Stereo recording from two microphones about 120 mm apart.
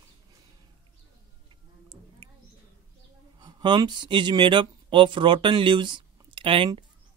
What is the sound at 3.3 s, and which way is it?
Speech, 40° right (ahead or behind).